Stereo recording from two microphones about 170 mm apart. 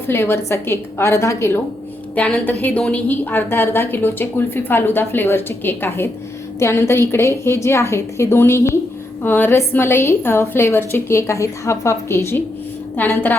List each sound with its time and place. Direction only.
0.1 s a woman's voice: 15° left (ahead or behind)